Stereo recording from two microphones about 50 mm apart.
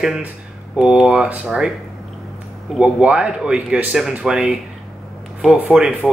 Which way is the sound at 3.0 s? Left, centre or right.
Right.